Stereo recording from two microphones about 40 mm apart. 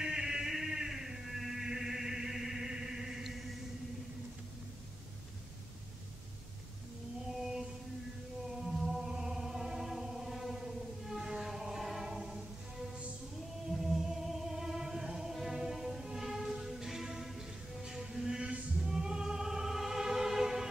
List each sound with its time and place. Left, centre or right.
0.0 s a sound: centre
7.2 s music: centre
8.8 s music: centre
13.7 s music: centre